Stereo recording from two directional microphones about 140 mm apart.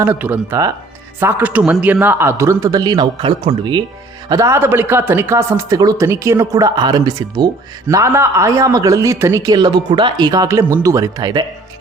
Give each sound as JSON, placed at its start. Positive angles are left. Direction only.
{"t": 0.0, "sound": "speech", "side_deg": -15}
{"t": 4.3, "sound": "speech", "side_deg": -20}